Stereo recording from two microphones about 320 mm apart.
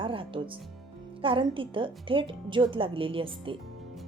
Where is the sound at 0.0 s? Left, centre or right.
Centre.